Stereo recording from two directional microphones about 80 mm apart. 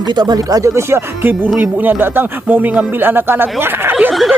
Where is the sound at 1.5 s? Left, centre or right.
Right.